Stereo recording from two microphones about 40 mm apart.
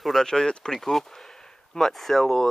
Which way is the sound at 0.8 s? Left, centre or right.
Centre.